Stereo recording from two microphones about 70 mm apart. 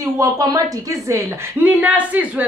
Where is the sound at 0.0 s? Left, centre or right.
Right.